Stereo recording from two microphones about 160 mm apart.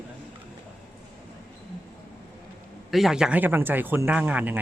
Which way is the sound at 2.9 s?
Centre (ahead or behind).